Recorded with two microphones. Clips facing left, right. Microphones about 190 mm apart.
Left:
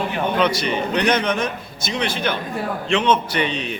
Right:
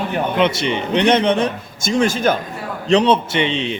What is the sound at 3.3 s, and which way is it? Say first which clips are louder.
Speech: right 4 dB; 25° right (ahead or behind).